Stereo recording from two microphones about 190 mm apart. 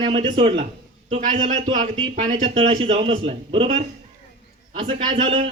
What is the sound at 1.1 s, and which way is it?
A man's voice, 40° right (ahead or behind).